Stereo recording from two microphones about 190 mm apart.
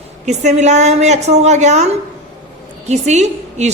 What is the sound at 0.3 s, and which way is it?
A woman's voice, 35° right (ahead or behind).